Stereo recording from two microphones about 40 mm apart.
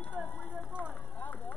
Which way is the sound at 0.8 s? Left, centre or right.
Left.